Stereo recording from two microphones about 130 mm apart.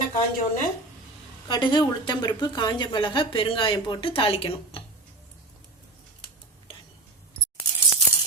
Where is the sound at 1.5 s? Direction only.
35° left (ahead or behind).